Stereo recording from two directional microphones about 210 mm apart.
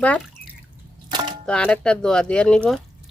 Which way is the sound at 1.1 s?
20° right (ahead or behind).